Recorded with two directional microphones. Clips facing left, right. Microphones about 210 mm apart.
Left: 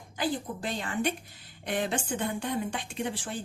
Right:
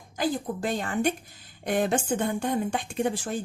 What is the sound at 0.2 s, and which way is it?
A woman's voice, 45° right (ahead or behind).